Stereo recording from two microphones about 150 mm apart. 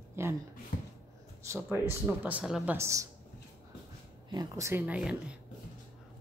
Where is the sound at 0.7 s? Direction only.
70° left (ahead or behind).